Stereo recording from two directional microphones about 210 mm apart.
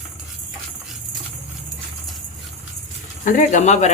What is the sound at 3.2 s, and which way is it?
Speech, 40° left (ahead or behind).